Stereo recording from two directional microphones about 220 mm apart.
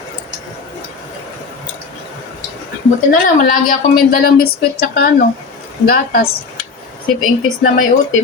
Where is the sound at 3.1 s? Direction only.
40° left (ahead or behind).